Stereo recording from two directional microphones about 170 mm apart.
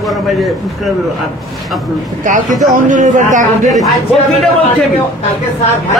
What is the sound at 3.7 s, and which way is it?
Speech, centre (ahead or behind).